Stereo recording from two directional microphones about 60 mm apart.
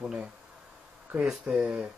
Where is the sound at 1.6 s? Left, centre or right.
Right.